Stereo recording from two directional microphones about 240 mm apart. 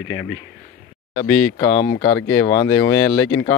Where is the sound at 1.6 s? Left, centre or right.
Centre.